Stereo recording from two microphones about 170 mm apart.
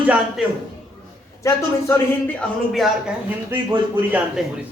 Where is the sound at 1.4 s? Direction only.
10° left (ahead or behind).